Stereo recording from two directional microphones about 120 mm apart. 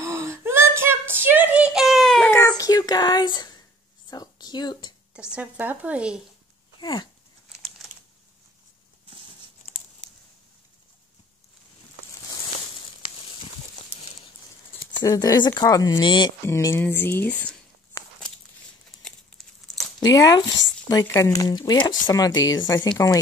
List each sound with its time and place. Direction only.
0.0 s a sound: 25° right (ahead or behind); by 2.3 s 5° left (ahead or behind)
2.3 s a sound: 25° left (ahead or behind)
5.3 s speech: 15° right (ahead or behind)
6.8 s speech: 35° left (ahead or behind)
7.8 s crumpling: centre (ahead or behind)
15.0 s speech: 30° left (ahead or behind)
16.4 s speech: 20° left (ahead or behind)
17.9 s a sound: 20° left (ahead or behind)
20.0 s speech: 30° left (ahead or behind)